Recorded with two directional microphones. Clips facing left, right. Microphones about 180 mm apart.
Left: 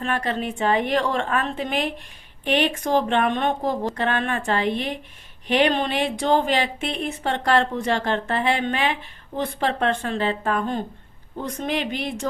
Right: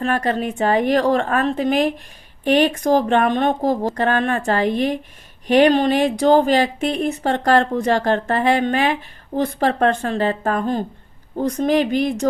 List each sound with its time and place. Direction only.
0.0 s a woman's voice: 40° right (ahead or behind)